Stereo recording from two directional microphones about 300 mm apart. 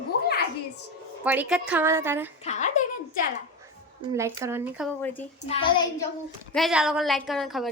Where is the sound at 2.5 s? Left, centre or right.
Left.